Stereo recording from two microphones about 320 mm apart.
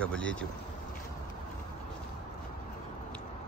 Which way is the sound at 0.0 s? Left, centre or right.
Centre.